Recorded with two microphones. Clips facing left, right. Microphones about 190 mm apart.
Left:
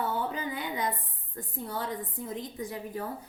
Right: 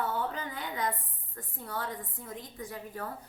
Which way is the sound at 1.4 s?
20° left (ahead or behind).